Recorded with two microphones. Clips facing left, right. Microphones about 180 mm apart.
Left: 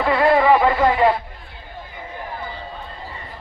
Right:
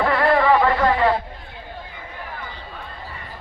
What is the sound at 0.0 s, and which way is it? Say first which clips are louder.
Music: left 2 dB; 20° left (ahead or behind).